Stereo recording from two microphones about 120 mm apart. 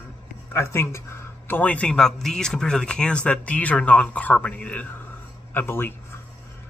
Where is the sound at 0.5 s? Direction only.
20° left (ahead or behind).